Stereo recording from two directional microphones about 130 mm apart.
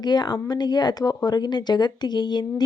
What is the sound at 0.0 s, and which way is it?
A woman's voice, 35° left (ahead or behind).